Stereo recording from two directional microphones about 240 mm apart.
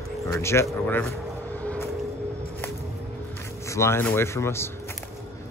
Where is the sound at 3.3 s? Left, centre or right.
Centre.